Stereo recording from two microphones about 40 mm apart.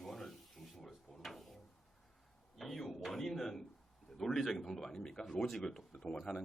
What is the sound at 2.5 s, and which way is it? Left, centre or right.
A man's voice, centre.